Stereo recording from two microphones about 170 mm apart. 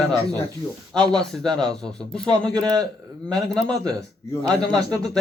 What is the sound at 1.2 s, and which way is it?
Speech, 5° left (ahead or behind).